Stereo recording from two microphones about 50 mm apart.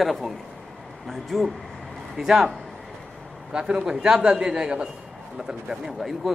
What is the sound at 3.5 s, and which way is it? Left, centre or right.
A man's voice, centre.